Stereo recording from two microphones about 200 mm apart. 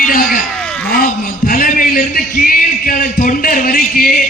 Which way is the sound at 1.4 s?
45° left (ahead or behind).